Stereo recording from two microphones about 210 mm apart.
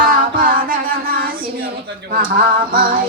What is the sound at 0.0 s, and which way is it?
Music, 40° right (ahead or behind).